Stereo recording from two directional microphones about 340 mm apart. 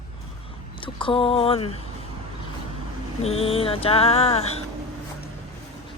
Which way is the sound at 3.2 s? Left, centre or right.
Centre.